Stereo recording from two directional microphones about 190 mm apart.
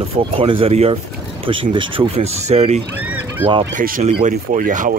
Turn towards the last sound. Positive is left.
turn(degrees=-45)  # may be behind; listen again after turning